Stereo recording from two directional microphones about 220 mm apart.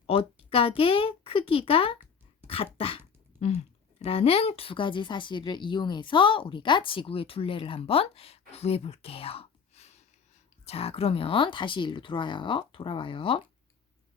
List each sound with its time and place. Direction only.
0.0 s a woman's voice: 25° left (ahead or behind)
4.0 s a woman's voice: 25° left (ahead or behind)